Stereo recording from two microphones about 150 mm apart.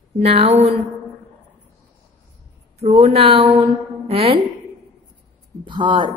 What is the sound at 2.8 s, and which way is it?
A woman's voice, 45° right (ahead or behind).